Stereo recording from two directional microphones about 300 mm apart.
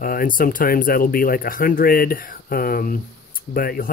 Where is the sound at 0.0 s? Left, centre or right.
Left.